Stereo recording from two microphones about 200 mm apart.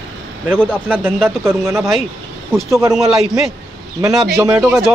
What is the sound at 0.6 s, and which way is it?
Speech, 5° left (ahead or behind).